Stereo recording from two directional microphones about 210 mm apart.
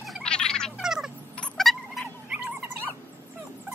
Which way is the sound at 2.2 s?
5° right (ahead or behind).